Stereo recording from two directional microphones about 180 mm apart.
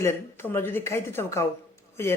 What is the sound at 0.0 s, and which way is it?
Speech, 15° left (ahead or behind).